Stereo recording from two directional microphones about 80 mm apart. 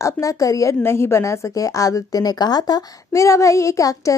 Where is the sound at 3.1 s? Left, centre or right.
Left.